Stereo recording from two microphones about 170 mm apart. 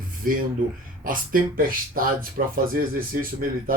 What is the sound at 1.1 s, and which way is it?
Speech, 55° right (ahead or behind).